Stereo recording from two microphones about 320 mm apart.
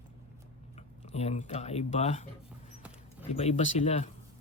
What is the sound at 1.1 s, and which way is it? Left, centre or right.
Speech, left.